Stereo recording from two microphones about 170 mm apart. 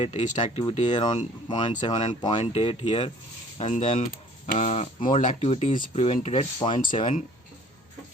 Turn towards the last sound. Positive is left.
turn(degrees=30)  # may be behind; listen again after turning